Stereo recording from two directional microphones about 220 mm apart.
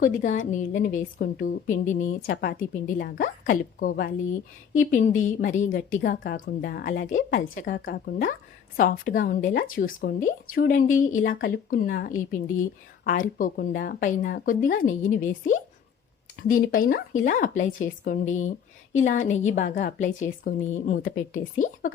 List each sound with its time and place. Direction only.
0.0 s a woman's voice: 35° left (ahead or behind)